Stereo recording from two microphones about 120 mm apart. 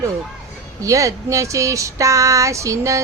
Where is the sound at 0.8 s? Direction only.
25° right (ahead or behind).